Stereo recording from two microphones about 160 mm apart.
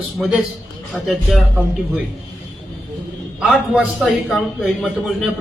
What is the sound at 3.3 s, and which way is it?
A man's voice, 5° right (ahead or behind).